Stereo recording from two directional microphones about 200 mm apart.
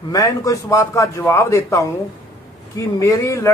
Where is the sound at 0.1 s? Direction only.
15° left (ahead or behind).